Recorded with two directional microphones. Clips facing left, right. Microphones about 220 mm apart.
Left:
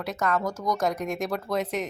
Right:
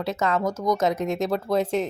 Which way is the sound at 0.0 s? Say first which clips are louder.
Right 3 dB; 25° right (ahead or behind).